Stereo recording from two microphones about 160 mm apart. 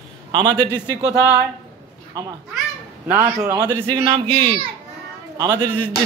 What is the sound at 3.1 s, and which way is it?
Speech, 20° right (ahead or behind).